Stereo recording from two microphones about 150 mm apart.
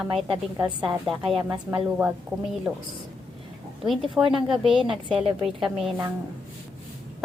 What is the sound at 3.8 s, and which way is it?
Speech, centre (ahead or behind).